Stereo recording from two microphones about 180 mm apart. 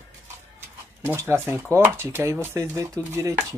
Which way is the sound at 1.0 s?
15° right (ahead or behind).